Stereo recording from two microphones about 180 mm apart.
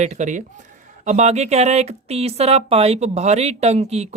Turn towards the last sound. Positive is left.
turn(degrees=-35)  # may be behind; listen again after turning